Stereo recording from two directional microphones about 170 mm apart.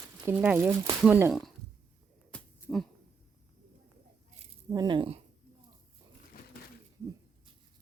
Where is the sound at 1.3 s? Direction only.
Centre (ahead or behind).